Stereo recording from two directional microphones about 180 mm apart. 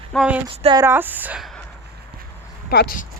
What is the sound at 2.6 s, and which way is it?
Speech, 55° left (ahead or behind).